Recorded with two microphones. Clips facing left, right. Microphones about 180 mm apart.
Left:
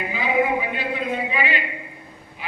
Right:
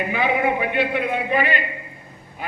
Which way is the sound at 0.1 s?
60° right (ahead or behind).